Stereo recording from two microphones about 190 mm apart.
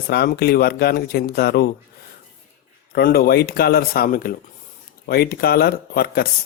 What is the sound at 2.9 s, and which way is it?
Speech, 55° left (ahead or behind).